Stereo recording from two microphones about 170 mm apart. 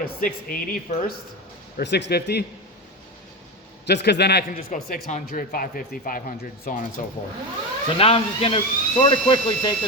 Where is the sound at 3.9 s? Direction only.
80° left; by 6.9 s 50° left (ahead or behind).